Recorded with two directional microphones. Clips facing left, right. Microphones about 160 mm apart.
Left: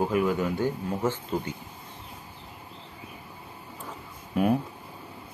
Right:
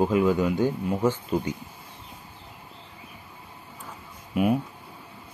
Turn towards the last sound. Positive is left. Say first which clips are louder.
# right 1 dB
turn(degrees=-5)  # may be behind; listen again after turning